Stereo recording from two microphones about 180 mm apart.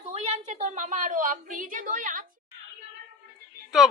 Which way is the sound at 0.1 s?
40° right (ahead or behind).